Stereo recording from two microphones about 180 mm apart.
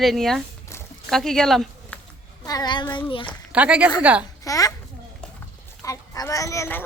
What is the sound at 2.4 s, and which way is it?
Child singing, 20° left (ahead or behind).